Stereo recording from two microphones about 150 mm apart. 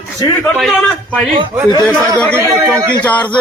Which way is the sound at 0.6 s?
Centre (ahead or behind).